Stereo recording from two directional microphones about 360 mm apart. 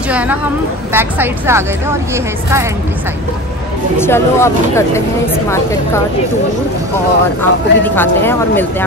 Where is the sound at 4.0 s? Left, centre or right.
Centre.